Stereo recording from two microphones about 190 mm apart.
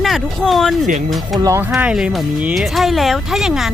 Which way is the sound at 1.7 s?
5° right (ahead or behind).